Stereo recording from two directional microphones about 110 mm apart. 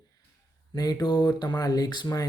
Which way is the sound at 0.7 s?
35° left (ahead or behind).